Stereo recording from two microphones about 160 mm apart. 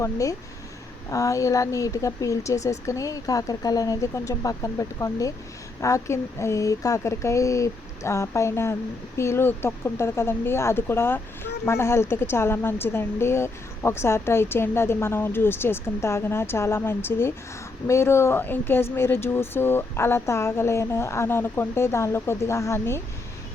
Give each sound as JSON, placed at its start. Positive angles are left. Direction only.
{"t": 0.0, "sound": "a woman's voice", "side_deg": 20}